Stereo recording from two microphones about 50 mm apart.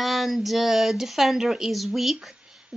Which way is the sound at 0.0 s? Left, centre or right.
Centre.